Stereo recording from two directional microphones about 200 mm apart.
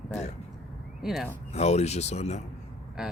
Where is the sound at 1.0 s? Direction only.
Centre (ahead or behind).